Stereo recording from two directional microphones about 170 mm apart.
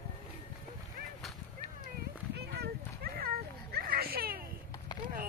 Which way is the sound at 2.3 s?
70° right (ahead or behind).